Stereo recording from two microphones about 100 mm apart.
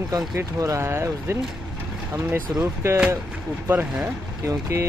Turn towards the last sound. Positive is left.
turn(degrees=-30)  # may be behind; listen again after turning